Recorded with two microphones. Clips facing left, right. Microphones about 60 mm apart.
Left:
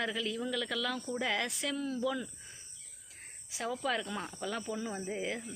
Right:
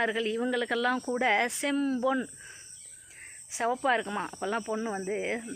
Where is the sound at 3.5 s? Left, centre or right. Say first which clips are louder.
Right 7 dB; right.